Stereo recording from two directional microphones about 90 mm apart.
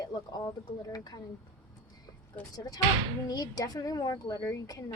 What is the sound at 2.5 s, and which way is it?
Speech, 45° left (ahead or behind).